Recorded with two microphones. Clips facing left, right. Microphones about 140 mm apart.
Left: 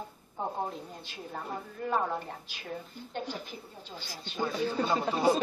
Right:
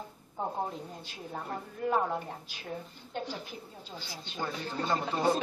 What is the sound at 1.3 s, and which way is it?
Speech, 5° right (ahead or behind).